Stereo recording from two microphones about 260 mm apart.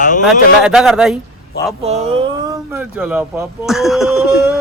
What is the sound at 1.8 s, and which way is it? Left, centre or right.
Speech, right.